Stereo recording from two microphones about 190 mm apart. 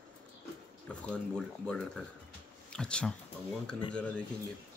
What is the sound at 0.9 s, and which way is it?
Speech, 5° left (ahead or behind).